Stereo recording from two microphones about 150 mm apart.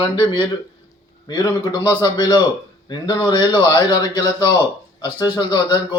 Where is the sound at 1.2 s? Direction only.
30° left (ahead or behind).